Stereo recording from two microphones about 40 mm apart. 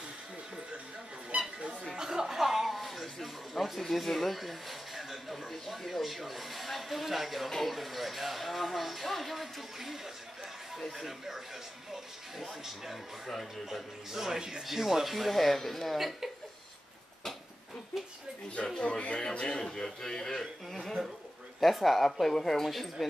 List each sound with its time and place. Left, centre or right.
1.3 s squeak: right
2.0 s speech: centre
13.3 s speech: centre
13.7 s speech: centre
18.8 s a man's voice: left; by 23.0 s centre